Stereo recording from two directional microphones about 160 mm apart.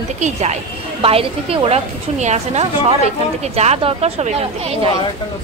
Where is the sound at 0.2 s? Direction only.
45° right (ahead or behind).